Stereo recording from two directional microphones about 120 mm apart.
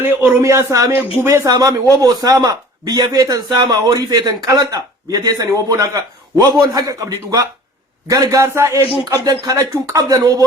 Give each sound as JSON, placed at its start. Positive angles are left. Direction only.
{"t": 0.0, "sound": "speech", "side_deg": -15}